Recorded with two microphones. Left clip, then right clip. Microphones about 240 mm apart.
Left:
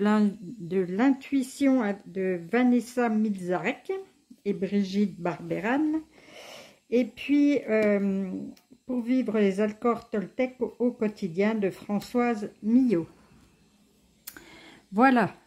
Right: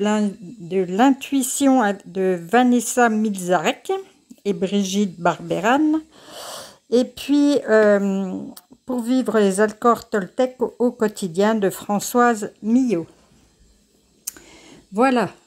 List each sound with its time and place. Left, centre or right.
0.0 s speech: centre
0.8 s speech: centre
14.2 s clicking: centre